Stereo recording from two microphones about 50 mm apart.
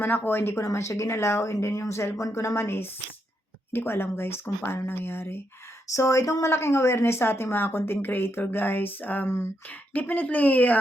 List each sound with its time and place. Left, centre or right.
0.3 s speech: left
0.7 s speech: left
1.0 s speech: left
2.1 s speech: left
3.7 s speech: left
5.9 s speech: left
9.2 s speech: left
9.9 s speech: left